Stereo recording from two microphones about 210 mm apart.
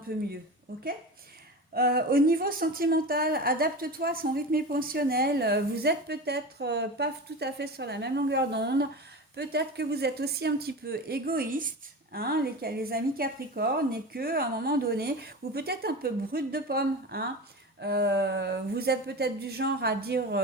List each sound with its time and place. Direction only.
0.1 s a woman's voice: 45° right (ahead or behind)
1.7 s a woman's voice: 45° right (ahead or behind)